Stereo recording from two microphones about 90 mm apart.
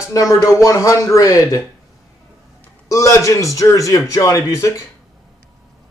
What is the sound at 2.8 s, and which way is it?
A man's voice, 40° left (ahead or behind).